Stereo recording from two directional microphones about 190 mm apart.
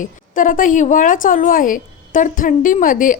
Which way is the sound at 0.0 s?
45° left (ahead or behind).